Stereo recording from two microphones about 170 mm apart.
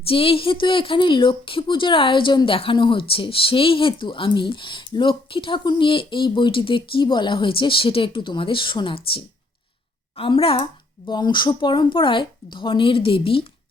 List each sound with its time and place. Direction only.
0.1 s a woman's voice: 35° left (ahead or behind)
10.2 s a woman's voice: 30° left (ahead or behind)